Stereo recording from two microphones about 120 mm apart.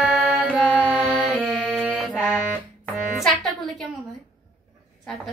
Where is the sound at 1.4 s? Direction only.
5° left (ahead or behind).